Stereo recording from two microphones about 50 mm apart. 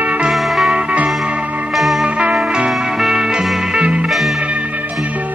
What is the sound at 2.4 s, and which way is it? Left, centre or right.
Music, centre.